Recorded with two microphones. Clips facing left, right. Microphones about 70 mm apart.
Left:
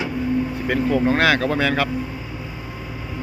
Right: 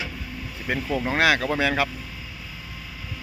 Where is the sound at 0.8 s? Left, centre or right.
Left.